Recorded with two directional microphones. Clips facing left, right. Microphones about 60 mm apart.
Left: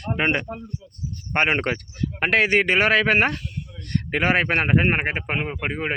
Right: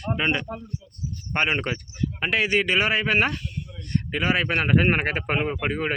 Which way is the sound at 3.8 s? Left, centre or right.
Left.